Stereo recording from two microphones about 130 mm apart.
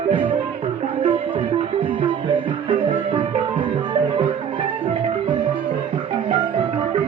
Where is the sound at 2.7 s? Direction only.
40° right (ahead or behind).